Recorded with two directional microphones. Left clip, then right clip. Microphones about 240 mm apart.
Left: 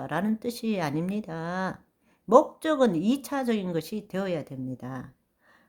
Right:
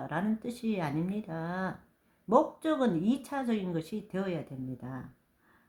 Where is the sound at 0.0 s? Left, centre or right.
Left.